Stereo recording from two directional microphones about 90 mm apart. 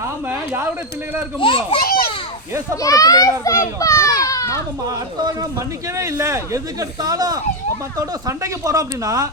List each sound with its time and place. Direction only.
0.3 s a sound: 25° right (ahead or behind)
1.4 s a child's voice: 70° left (ahead or behind)
2.8 s a child's voice: 40° left (ahead or behind)
4.9 s speech: 50° right (ahead or behind)
5.5 s speech: 35° right (ahead or behind)